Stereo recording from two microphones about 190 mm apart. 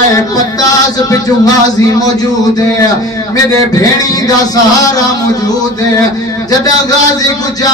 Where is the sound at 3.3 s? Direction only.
20° left (ahead or behind).